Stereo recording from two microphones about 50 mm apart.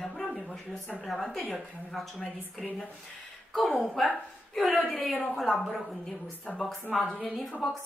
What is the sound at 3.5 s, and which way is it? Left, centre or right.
A woman's voice, centre.